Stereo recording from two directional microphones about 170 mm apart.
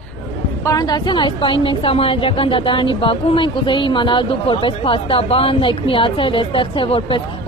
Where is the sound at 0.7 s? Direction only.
25° left (ahead or behind).